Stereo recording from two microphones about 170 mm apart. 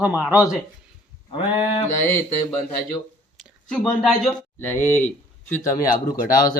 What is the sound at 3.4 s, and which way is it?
Speech, centre (ahead or behind).